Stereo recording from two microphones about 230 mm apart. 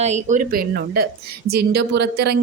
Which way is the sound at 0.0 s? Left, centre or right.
Right.